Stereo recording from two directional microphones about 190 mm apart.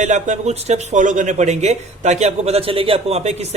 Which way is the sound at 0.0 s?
40° right (ahead or behind).